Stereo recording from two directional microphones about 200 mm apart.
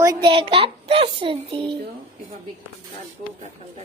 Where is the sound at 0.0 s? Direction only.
20° right (ahead or behind).